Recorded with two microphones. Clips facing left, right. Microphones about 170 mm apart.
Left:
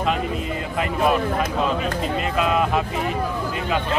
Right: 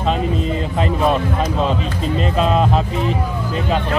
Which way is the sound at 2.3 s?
30° right (ahead or behind).